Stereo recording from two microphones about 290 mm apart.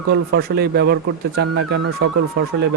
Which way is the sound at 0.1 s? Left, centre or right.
Right.